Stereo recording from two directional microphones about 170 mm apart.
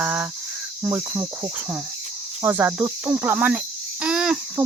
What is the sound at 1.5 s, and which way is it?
Speech, 10° right (ahead or behind).